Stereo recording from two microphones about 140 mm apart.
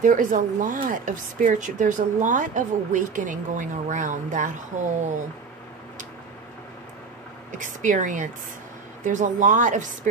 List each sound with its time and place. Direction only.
0.0 s speech: 70° right (ahead or behind)
7.5 s speech: 65° right (ahead or behind)